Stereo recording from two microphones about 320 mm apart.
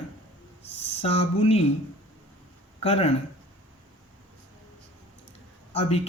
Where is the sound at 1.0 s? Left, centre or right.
Centre.